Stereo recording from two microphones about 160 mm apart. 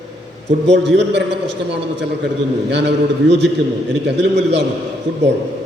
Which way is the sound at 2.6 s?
90° right.